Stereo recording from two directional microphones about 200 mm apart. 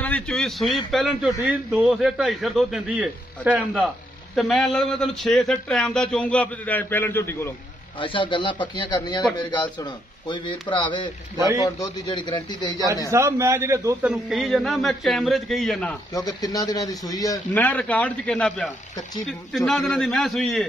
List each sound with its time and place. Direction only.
0.0 s a man's voice: 5° left (ahead or behind)
8.0 s speech: 25° left (ahead or behind)
11.3 s a man's voice: 15° right (ahead or behind)
11.6 s speech: 20° left (ahead or behind)
13.1 s a man's voice: 15° right (ahead or behind)
14.1 s speech: centre (ahead or behind)
16.1 s a man's voice: 20° left (ahead or behind); by 20.6 s centre (ahead or behind)